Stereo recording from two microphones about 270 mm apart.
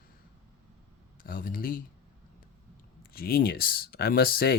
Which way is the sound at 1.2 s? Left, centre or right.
Left.